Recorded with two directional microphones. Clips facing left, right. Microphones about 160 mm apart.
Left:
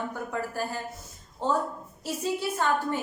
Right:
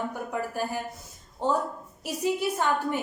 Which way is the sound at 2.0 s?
15° right (ahead or behind).